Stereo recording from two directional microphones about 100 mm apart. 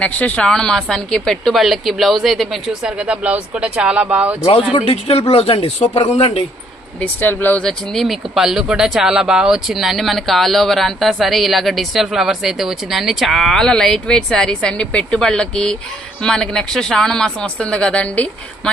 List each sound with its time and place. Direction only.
0.0 s speech: 15° left (ahead or behind); by 4.4 s 15° right (ahead or behind)
4.7 s speech: 80° left
7.0 s speech: 20° left (ahead or behind)
7.6 s speech: 5° left (ahead or behind)